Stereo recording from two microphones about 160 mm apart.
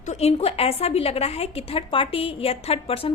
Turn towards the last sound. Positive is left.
turn(degrees=35)  # may be behind; listen again after turning